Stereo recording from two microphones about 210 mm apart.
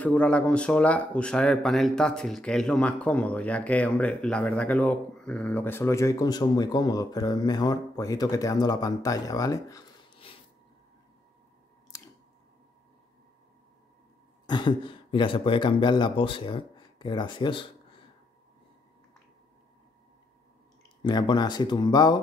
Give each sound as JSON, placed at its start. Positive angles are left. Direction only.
{"t": 0.0, "sound": "speech", "side_deg": 5}
{"t": 11.9, "sound": "chewing", "side_deg": 15}
{"t": 14.4, "sound": "speech", "side_deg": 20}
{"t": 21.0, "sound": "speech", "side_deg": 20}